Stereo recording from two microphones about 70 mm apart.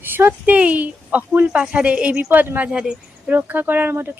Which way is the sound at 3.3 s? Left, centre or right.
Right.